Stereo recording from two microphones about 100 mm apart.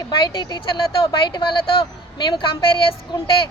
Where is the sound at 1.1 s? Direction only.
55° left (ahead or behind).